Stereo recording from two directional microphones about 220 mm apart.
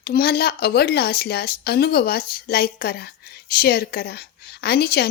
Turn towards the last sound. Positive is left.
turn(degrees=45)  # may be behind; listen again after turning